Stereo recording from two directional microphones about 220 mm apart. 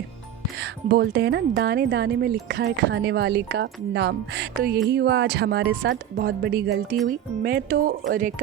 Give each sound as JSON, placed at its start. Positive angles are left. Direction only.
{"t": 0.6, "sound": "speech", "side_deg": -50}